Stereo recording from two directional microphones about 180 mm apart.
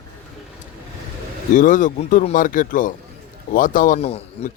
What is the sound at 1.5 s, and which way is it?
Speech, 45° left (ahead or behind).